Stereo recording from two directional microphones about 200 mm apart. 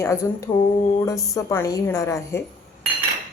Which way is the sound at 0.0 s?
15° left (ahead or behind).